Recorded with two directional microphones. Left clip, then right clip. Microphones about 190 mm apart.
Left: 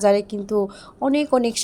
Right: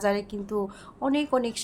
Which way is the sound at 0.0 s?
30° left (ahead or behind).